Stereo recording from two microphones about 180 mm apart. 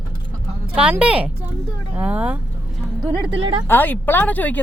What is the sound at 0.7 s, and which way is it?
A woman's voice, 5° right (ahead or behind).